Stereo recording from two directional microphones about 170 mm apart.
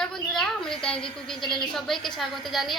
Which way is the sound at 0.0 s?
5° left (ahead or behind).